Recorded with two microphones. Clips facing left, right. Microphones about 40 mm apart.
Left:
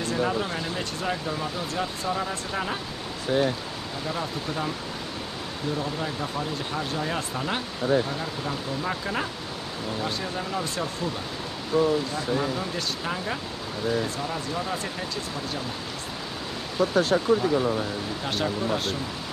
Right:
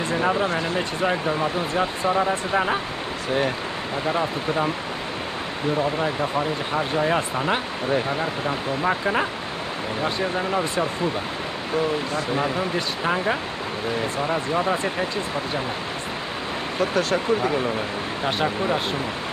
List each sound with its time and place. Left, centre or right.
0.0 s speech: right
4.0 s speech: right
5.8 s speech: right
12.4 s speech: right
18.2 s speech: right